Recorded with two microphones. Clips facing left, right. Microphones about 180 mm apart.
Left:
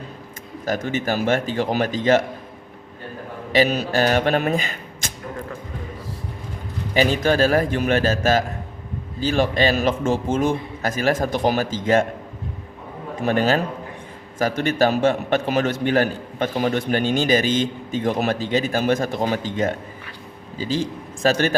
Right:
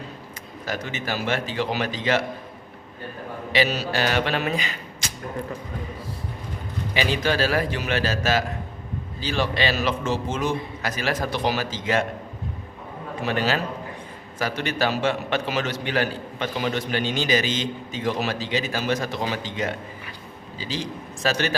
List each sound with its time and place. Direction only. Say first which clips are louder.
0.6 s a man's voice: left 7 dB; 45° left (ahead or behind)
3.5 s speech: left 5 dB; 50° left (ahead or behind)
6.9 s a man's voice: left 5 dB; 45° left (ahead or behind)
13.2 s a man's voice: left 5 dB; 50° left (ahead or behind)